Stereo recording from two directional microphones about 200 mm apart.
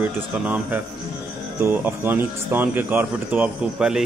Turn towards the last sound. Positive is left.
turn(degrees=-5)  # may be behind; listen again after turning